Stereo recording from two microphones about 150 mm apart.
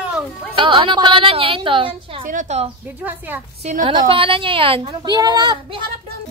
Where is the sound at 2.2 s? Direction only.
55° right (ahead or behind).